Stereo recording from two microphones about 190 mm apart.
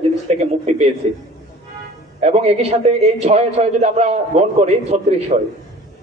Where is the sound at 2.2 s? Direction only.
35° right (ahead or behind).